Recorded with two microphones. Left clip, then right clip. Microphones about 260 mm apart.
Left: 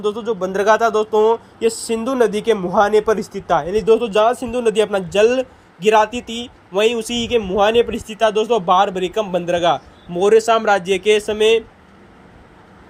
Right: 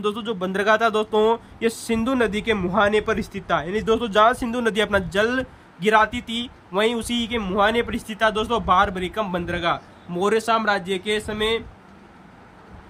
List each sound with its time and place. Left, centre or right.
0.0 s a man's voice: centre
0.3 s speech: centre
3.8 s a man's voice: centre